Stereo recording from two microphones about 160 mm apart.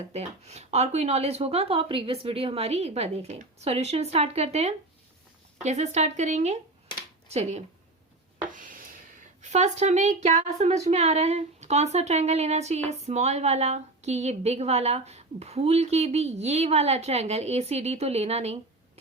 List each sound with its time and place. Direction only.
0.1 s a woman's voice: 40° right (ahead or behind)
8.4 s a sound: 55° right (ahead or behind)
9.4 s a woman's voice: 45° right (ahead or behind)